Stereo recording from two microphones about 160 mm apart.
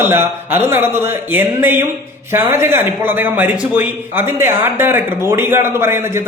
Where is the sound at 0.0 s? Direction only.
15° right (ahead or behind).